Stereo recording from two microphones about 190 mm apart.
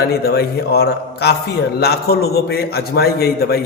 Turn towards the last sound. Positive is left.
turn(degrees=55)  # may be behind; listen again after turning